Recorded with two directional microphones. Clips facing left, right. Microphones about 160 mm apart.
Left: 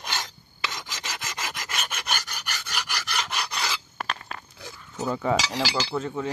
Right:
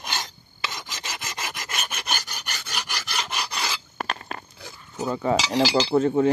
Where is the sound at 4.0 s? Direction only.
45° right (ahead or behind).